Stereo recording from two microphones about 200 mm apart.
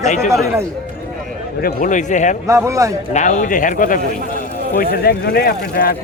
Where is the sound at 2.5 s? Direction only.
15° right (ahead or behind).